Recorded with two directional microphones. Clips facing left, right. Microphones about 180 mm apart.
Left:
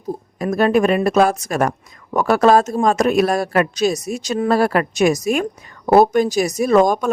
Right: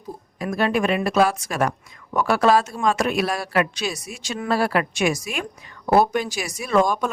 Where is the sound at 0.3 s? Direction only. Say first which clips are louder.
Left 6 dB; 45° left (ahead or behind).